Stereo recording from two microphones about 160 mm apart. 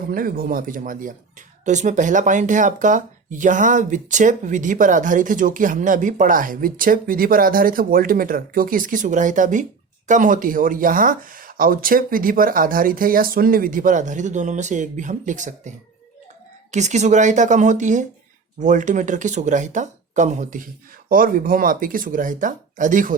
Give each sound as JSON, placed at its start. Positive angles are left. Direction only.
{"t": 0.1, "sound": "speech", "side_deg": -60}
{"t": 16.7, "sound": "speech", "side_deg": -45}